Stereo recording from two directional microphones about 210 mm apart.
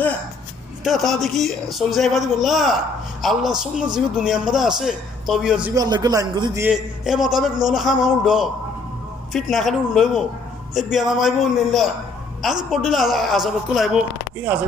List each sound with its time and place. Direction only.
0.8 s a man's voice: centre (ahead or behind)
5.8 s a man's voice: 20° right (ahead or behind)
6.6 s a man's voice: centre (ahead or behind)